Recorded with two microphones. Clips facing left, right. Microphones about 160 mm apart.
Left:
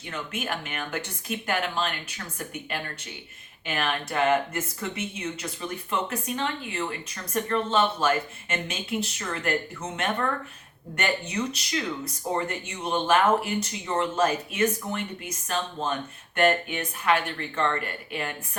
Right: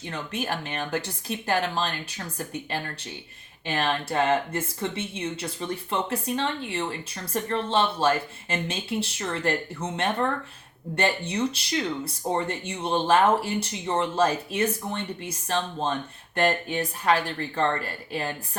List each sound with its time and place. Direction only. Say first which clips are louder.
0.1 s speech: right 1 dB; 35° right (ahead or behind)
10.9 s speech: right 2 dB; 30° right (ahead or behind)